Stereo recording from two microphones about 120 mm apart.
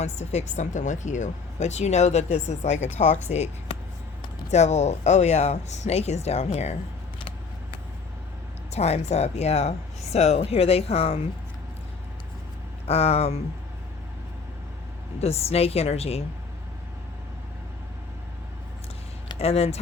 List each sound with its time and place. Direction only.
0.0 s speech: 70° left (ahead or behind)
8.7 s speech: 65° left (ahead or behind)
12.9 s speech: 60° left (ahead or behind)
15.2 s speech: 60° left (ahead or behind)
19.4 s speech: 55° left (ahead or behind)